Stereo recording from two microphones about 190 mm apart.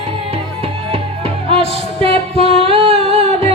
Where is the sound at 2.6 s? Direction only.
30° right (ahead or behind).